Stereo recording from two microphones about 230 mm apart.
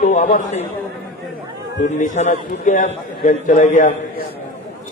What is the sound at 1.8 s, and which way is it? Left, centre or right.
A man's voice, left.